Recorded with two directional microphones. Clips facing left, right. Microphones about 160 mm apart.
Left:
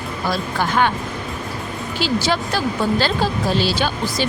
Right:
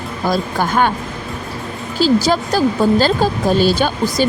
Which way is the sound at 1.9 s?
40° right (ahead or behind).